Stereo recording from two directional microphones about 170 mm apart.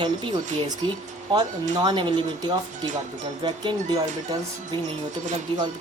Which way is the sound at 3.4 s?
25° right (ahead or behind).